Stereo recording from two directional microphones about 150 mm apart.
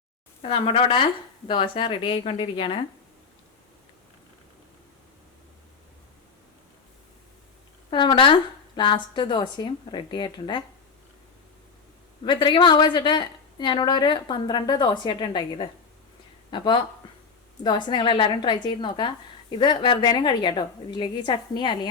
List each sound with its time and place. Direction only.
0.4 s a woman's voice: 35° left (ahead or behind)
7.9 s a woman's voice: 30° left (ahead or behind)
12.2 s a woman's voice: 30° left (ahead or behind)